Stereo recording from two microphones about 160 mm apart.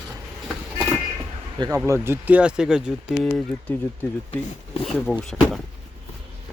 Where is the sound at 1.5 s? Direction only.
25° right (ahead or behind).